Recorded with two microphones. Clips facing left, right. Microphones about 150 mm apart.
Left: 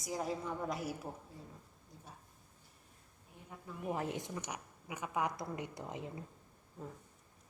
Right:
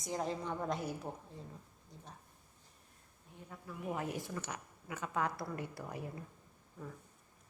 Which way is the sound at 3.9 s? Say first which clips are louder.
Even; 25° left (ahead or behind).